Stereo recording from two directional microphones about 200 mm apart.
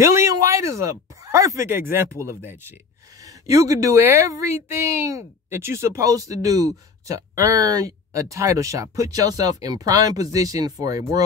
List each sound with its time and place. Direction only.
0.0 s speech: 15° right (ahead or behind)